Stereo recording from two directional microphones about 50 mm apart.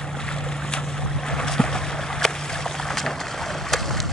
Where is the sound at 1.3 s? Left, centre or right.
Centre.